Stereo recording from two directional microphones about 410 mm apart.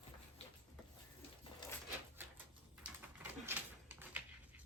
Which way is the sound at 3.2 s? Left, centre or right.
Centre.